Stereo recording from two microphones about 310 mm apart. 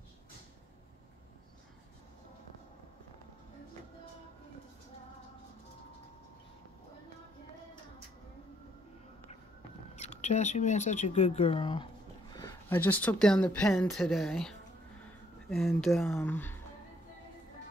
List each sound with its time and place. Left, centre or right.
9.9 s speech: left; by 16.5 s centre